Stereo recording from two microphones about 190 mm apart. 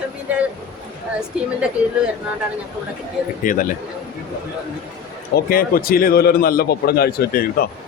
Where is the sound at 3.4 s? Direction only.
45° left (ahead or behind).